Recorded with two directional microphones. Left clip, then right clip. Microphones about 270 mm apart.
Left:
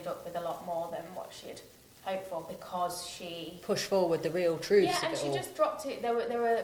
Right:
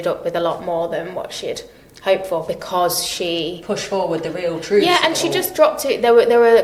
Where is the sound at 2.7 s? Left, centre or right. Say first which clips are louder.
Right 15 dB; right.